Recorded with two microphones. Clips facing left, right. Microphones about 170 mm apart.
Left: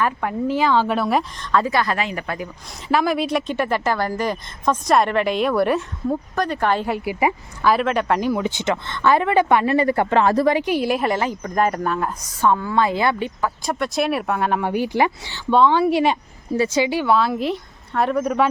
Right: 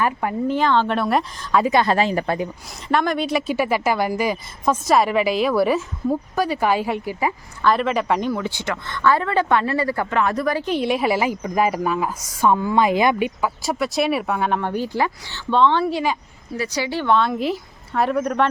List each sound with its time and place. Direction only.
0.0 s a woman's voice: 5° right (ahead or behind)
1.5 s speech: 20° right (ahead or behind)
2.9 s a woman's voice: 5° left (ahead or behind)
7.0 s a woman's voice: 15° left (ahead or behind)
8.3 s speech: 20° left (ahead or behind)
10.5 s speech: 10° left (ahead or behind); by 13.5 s 15° right (ahead or behind)
13.6 s a woman's voice: 5° right (ahead or behind)
16.6 s a woman's voice: 25° left (ahead or behind); by 18.4 s 5° left (ahead or behind)